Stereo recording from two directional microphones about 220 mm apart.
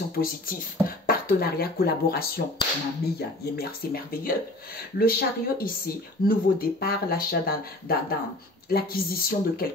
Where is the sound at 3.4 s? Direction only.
45° left (ahead or behind).